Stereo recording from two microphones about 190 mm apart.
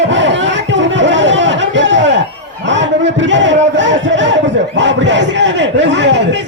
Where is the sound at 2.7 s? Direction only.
75° right (ahead or behind).